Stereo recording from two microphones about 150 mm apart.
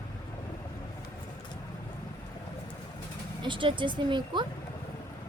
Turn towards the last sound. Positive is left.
turn(degrees=-30)  # may be behind; listen again after turning